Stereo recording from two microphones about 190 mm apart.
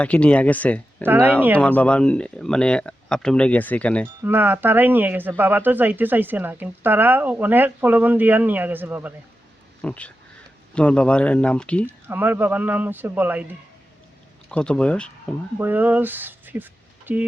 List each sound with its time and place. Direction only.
0.0 s speech: 5° left (ahead or behind)
1.0 s speech: 10° right (ahead or behind)
1.5 s speech: 5° left (ahead or behind)
4.2 s speech: 10° right (ahead or behind)
9.8 s speech: 5° left (ahead or behind)
11.9 s speech: 10° right (ahead or behind)
14.5 s speech: 5° left (ahead or behind)
15.5 s speech: 10° right (ahead or behind)